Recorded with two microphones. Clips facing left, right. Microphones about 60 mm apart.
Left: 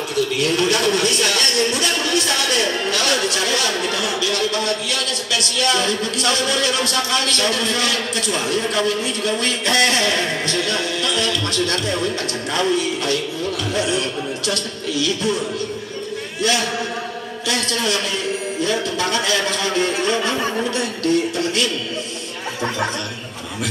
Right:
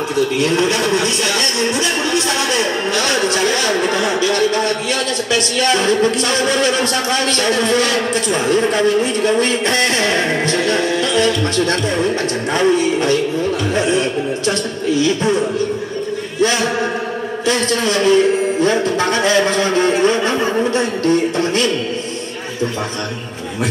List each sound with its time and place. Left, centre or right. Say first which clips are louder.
0.1 s a man's voice: right 3 dB; right
17.5 s a man's voice: right 5 dB; right